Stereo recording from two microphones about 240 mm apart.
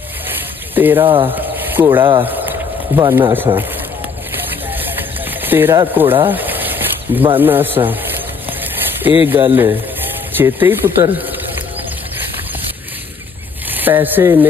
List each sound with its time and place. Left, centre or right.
0.7 s speech: centre
1.0 s speech: right
1.3 s speech: centre
2.2 s a sound: centre
3.0 s speech: centre
4.6 s a sound: centre
5.4 s speech: centre
6.2 s a sound: centre
9.2 s speech: centre
13.7 s speech: centre